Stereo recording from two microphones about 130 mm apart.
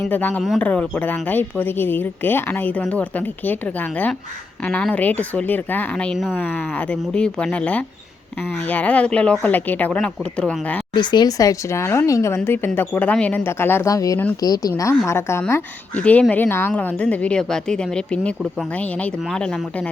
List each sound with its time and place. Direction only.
0.1 s a woman's voice: 15° left (ahead or behind)
6.3 s a woman's voice: 15° left (ahead or behind)
10.9 s a woman's voice: 35° left (ahead or behind); by 19.9 s 5° left (ahead or behind)